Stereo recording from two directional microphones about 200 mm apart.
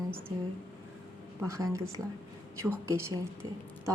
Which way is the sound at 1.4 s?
15° right (ahead or behind).